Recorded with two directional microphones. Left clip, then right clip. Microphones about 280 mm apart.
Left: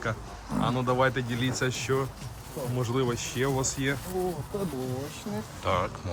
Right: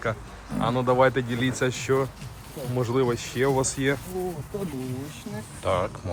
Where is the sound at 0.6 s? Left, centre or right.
Centre.